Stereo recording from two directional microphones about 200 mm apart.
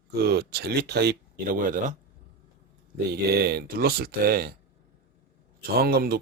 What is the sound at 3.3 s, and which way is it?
Speech, 50° right (ahead or behind).